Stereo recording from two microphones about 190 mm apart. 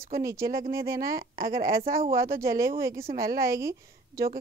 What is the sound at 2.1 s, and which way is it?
A woman's voice, 15° right (ahead or behind).